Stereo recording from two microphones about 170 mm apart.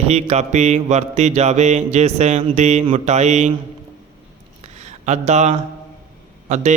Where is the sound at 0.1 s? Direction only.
40° right (ahead or behind).